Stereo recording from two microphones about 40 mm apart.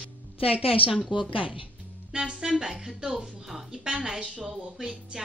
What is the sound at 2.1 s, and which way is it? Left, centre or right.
Speech, centre.